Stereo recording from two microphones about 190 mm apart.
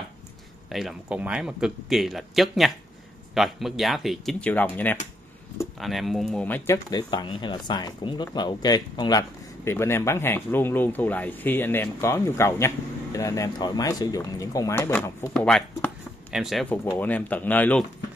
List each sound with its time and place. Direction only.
0.7 s speech: centre (ahead or behind)
15.3 s a sound: 5° left (ahead or behind)
16.8 s speech: 10° left (ahead or behind)